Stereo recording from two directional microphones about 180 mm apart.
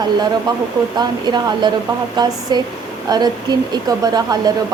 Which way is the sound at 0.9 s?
25° right (ahead or behind).